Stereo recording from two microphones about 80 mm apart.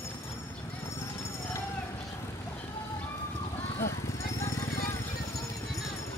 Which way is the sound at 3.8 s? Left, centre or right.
Left.